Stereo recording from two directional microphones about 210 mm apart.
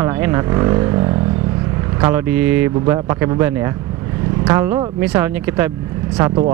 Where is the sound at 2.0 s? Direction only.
10° right (ahead or behind).